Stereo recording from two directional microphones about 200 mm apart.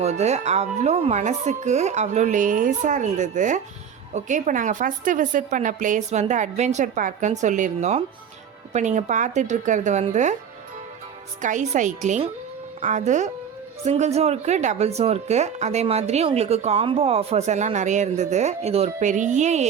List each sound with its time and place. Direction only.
0.0 s speech: 35° right (ahead or behind)
11.4 s speech: 40° right (ahead or behind)